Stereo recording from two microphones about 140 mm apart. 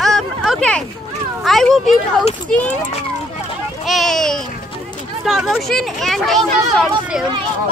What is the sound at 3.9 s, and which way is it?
Speech, centre (ahead or behind).